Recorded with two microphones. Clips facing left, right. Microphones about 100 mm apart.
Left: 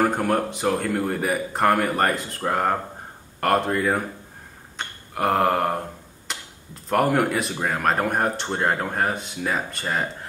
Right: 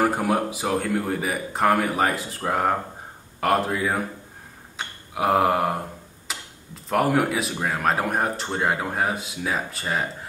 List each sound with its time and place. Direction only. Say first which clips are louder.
0.0 s speech: even; 5° right (ahead or behind)
4.7 s a sound: even; 5° right (ahead or behind)
6.2 s speech: left 1 dB; centre (ahead or behind)